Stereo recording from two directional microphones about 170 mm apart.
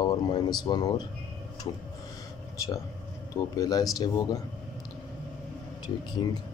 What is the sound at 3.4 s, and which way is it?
Speech, 20° left (ahead or behind).